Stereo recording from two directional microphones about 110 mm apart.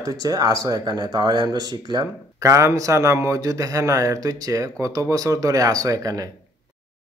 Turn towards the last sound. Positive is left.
turn(degrees=-35)  # may be behind; listen again after turning